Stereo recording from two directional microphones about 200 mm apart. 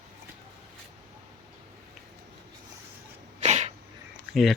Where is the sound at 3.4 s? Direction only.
35° right (ahead or behind).